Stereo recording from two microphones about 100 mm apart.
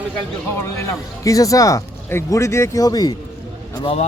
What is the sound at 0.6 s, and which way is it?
A man's voice, 35° left (ahead or behind).